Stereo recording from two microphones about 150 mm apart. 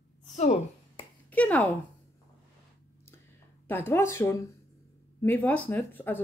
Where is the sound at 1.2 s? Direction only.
10° left (ahead or behind).